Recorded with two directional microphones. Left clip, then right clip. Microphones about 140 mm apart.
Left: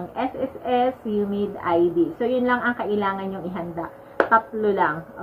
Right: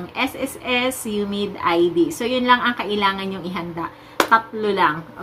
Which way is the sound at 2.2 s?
35° right (ahead or behind).